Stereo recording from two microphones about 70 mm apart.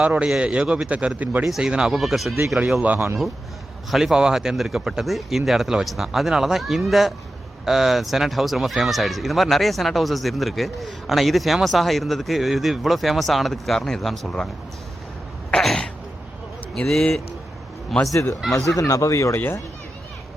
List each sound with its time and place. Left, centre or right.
0.0 s a man's voice: centre
1.5 s speech: centre
2.8 s speech: right
3.9 s speech: centre
15.6 s throat clearing: centre
16.7 s speech: centre
18.0 s speech: left
18.4 s speech: centre
18.8 s speech: left